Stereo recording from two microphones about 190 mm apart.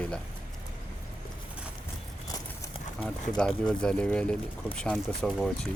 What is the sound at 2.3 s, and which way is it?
Horse, 20° left (ahead or behind).